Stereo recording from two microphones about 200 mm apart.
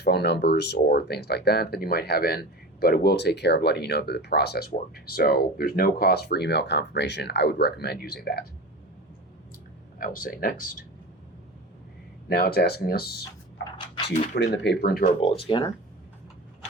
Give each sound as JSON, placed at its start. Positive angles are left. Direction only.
{"t": 0.0, "sound": "speech", "side_deg": 55}
{"t": 10.0, "sound": "speech", "side_deg": 45}
{"t": 12.3, "sound": "speech", "side_deg": 50}
{"t": 13.7, "sound": "dog", "side_deg": 25}
{"t": 14.3, "sound": "speech", "side_deg": 60}
{"t": 15.4, "sound": "speech", "side_deg": 25}